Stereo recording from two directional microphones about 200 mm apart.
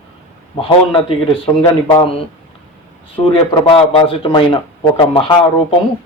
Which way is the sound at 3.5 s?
25° left (ahead or behind).